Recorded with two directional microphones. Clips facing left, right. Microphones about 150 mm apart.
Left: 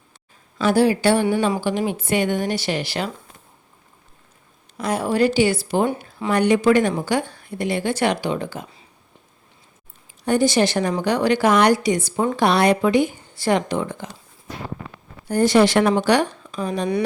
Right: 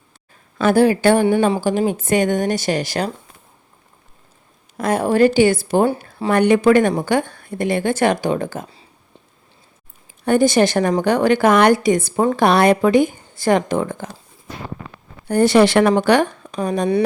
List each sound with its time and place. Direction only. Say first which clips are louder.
0.6 s a woman's voice: right 3 dB; 50° right (ahead or behind)
1.5 s a woman's voice: right 4 dB; 35° right (ahead or behind)
4.8 s a woman's voice: right 5 dB; 50° right (ahead or behind)
5.8 s speech: right 4 dB; 35° right (ahead or behind)
6.3 s a woman's voice: right 3 dB; 55° right (ahead or behind)
10.2 s a woman's voice: right 3 dB; 50° right (ahead or behind)
15.3 s speech: right 3 dB; 65° right (ahead or behind); by 16.9 s 45° right (ahead or behind)